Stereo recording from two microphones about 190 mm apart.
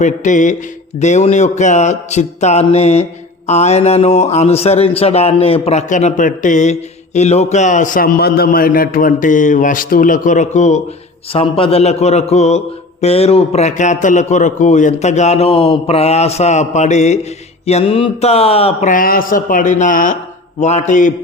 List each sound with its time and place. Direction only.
0.0 s speech: 40° left (ahead or behind)